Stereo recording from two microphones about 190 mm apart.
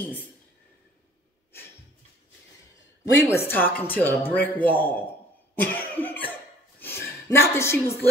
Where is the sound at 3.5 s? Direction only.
10° left (ahead or behind).